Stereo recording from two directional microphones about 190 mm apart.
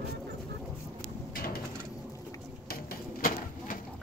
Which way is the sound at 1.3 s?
50° left (ahead or behind).